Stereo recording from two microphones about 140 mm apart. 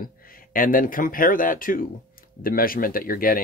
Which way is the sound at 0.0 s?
85° left.